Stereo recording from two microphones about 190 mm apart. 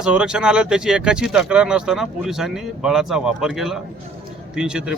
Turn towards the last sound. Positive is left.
turn(degrees=-5)  # may be behind; listen again after turning